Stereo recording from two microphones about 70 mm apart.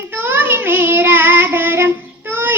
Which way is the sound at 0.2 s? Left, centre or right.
Right.